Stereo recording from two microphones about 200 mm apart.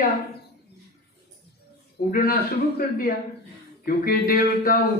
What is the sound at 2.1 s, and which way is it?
Speech, 45° left (ahead or behind).